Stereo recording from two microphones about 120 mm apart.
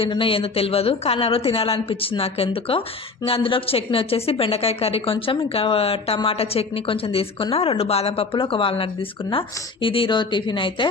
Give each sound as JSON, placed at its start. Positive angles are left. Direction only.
{"t": 0.0, "sound": "a woman's voice", "side_deg": 45}